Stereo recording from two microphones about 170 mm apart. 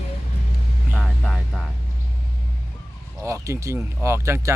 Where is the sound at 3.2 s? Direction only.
15° right (ahead or behind).